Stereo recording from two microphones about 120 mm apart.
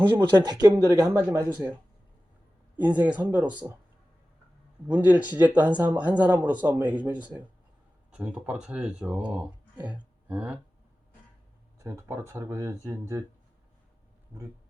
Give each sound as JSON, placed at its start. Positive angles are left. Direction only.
{"t": 0.2, "sound": "speech", "side_deg": -35}
{"t": 2.7, "sound": "speech", "side_deg": -15}
{"t": 4.9, "sound": "speech", "side_deg": -10}
{"t": 11.8, "sound": "speech", "side_deg": -25}
{"t": 14.3, "sound": "speech", "side_deg": -15}